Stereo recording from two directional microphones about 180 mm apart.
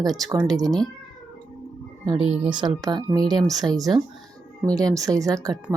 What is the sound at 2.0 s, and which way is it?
Speech, 30° right (ahead or behind).